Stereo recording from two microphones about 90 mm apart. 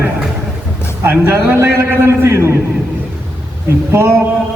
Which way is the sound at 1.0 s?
25° right (ahead or behind).